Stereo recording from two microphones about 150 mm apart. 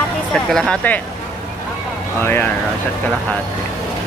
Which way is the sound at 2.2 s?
15° left (ahead or behind).